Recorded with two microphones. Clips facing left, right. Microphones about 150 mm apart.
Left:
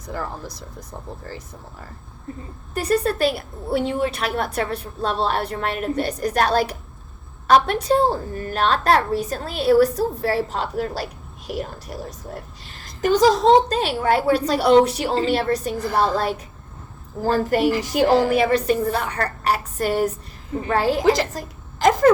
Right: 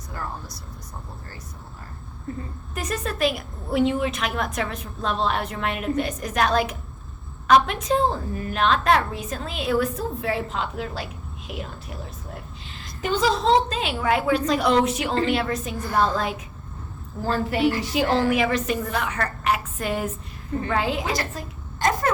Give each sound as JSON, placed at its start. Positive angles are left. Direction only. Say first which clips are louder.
{"t": 2.7, "sound": "a woman's voice", "louder": "left 8 dB", "side_deg": 35}